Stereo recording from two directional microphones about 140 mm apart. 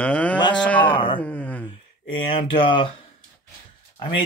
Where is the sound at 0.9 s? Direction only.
35° left (ahead or behind).